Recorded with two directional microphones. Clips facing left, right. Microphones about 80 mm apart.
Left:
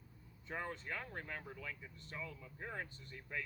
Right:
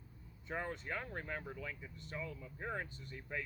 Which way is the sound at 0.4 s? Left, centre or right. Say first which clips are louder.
Right 2 dB; centre.